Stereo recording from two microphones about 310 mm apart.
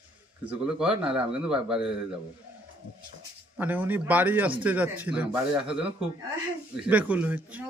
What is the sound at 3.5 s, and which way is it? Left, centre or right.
Speech, centre.